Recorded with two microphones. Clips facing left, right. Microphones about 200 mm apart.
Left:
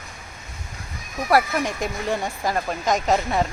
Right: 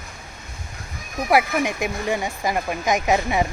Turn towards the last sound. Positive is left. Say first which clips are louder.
# right 1 dB
turn(degrees=-15)  # may be behind; listen again after turning